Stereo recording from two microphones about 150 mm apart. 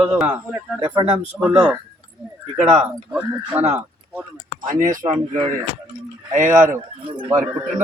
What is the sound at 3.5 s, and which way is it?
Speech, 10° right (ahead or behind).